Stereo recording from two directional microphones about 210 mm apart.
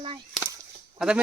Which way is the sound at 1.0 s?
5° right (ahead or behind).